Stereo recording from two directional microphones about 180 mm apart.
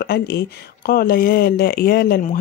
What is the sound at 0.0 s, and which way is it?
Speech, 65° left (ahead or behind).